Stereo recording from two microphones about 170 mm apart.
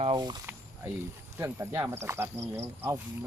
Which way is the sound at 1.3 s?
15° right (ahead or behind).